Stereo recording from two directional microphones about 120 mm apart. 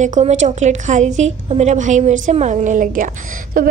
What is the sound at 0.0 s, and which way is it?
A woman's voice, 80° right.